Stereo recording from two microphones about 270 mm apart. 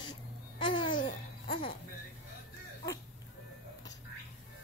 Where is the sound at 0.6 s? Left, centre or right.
Centre.